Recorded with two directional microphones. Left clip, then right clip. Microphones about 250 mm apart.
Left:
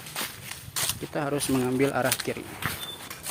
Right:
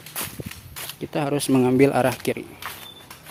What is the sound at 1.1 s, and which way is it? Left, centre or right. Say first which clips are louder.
Speech: right 6 dB; right.